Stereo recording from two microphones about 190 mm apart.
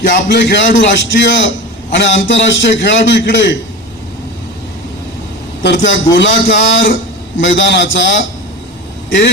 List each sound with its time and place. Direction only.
0.0 s a man's voice: 65° left (ahead or behind)
5.6 s a man's voice: 70° left (ahead or behind)